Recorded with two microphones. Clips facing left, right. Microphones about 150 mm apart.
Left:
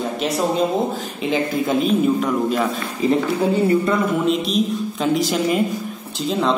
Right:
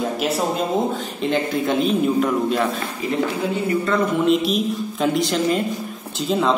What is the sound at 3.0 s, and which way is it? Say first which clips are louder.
Speech: left 7 dB; 30° left (ahead or behind).